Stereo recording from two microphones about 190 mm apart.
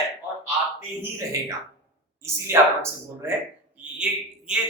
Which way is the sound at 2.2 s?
15° right (ahead or behind).